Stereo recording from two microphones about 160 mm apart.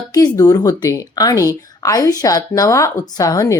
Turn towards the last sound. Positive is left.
turn(degrees=20)  # may be behind; listen again after turning